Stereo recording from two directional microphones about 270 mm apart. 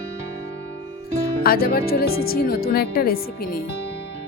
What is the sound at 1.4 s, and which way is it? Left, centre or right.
Speech, left.